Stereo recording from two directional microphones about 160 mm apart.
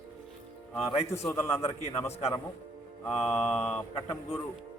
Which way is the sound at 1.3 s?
15° left (ahead or behind).